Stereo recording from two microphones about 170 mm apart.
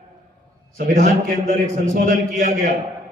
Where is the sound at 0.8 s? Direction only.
50° right (ahead or behind).